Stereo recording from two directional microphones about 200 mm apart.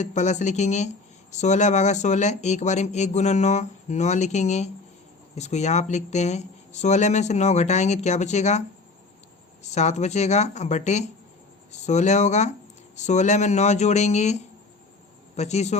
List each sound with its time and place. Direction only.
0.0 s speech: 35° left (ahead or behind)
9.6 s speech: 35° left (ahead or behind)